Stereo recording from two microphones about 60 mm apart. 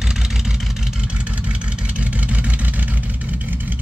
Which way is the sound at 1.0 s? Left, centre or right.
Centre.